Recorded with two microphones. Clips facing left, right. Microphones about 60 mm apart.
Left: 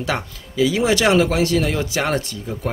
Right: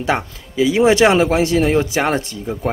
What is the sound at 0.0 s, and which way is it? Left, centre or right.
Speech, right.